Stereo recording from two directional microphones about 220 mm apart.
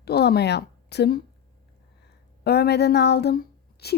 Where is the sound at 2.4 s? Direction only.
45° left (ahead or behind).